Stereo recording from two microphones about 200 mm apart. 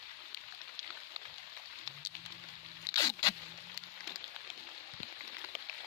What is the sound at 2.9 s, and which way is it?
Zipper, 20° left (ahead or behind).